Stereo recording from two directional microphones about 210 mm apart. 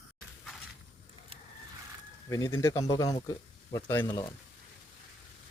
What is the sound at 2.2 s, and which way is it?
Speech, 15° left (ahead or behind).